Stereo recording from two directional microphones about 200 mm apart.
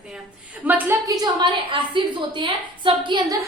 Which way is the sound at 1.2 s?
25° right (ahead or behind).